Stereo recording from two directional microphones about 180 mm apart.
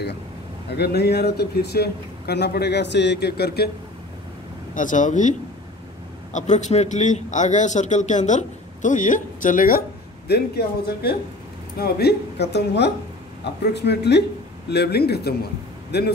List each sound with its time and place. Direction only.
0.7 s speech: 65° left (ahead or behind)
4.7 s speech: 45° left (ahead or behind)
6.3 s speech: 40° left (ahead or behind); by 16.1 s 65° left (ahead or behind)